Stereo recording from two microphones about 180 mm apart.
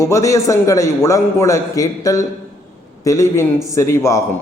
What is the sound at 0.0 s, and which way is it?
A man's voice, 15° left (ahead or behind).